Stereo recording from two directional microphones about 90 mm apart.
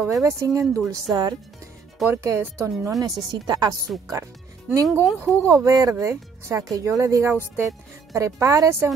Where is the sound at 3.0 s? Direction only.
45° right (ahead or behind).